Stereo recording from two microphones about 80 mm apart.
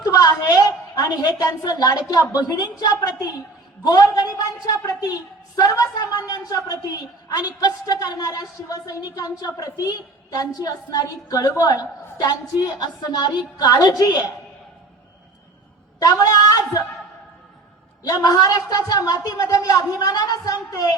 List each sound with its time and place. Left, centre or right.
0.0 s a sound: left
1.7 s a woman's voice: left
16.0 s a woman's voice: left
18.1 s a woman's voice: left